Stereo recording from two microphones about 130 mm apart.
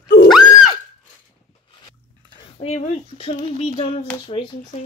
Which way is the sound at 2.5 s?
55° left (ahead or behind).